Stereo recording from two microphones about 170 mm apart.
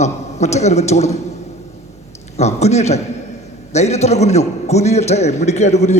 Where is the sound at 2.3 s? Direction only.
40° left (ahead or behind).